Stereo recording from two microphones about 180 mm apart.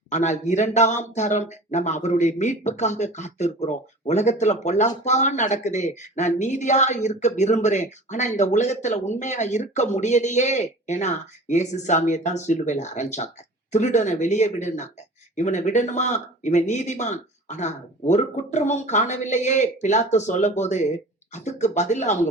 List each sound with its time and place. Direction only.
0.1 s speech: 40° left (ahead or behind)